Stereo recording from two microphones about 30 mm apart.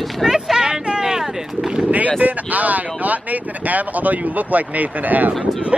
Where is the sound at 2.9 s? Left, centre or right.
Right.